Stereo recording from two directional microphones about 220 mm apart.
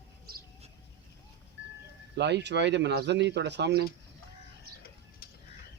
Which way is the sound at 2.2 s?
50° right (ahead or behind).